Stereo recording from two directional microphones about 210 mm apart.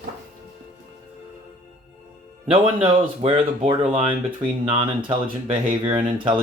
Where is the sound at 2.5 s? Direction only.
25° right (ahead or behind).